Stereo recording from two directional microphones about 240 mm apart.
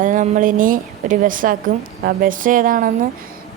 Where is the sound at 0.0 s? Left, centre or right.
Right.